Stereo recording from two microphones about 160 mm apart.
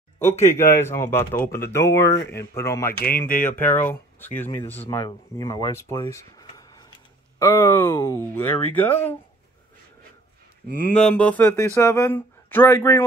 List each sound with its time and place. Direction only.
0.2 s speech: 15° left (ahead or behind)
3.1 s speech: 60° left (ahead or behind)
3.4 s speech: 15° left (ahead or behind)
4.8 s speech: 25° left (ahead or behind)
11.0 s speech: 5° left (ahead or behind)